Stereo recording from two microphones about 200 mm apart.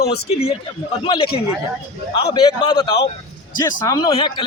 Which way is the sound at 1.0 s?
30° left (ahead or behind).